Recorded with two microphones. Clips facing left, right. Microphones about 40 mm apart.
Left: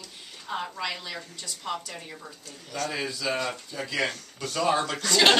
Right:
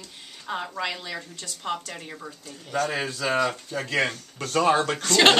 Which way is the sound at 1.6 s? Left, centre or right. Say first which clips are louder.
Right 3 dB; right.